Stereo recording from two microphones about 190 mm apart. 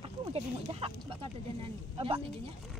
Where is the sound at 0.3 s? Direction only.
30° right (ahead or behind).